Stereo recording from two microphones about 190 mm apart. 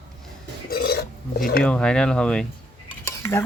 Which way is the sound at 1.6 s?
5° left (ahead or behind).